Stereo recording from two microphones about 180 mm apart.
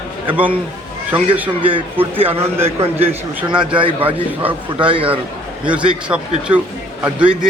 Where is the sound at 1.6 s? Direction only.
30° right (ahead or behind).